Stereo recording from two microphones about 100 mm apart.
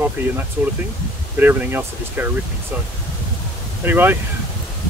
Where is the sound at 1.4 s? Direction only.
20° right (ahead or behind).